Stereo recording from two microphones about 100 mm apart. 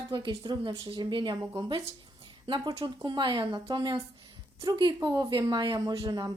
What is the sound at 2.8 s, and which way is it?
A woman's voice, 50° right (ahead or behind).